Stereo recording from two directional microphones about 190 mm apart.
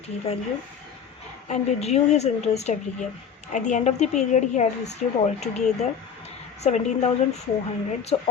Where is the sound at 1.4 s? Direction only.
35° left (ahead or behind).